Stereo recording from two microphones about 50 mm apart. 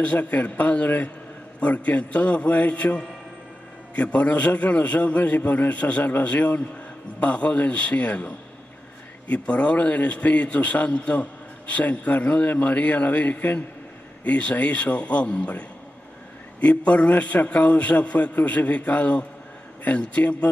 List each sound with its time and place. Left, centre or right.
0.0 s a man's voice: left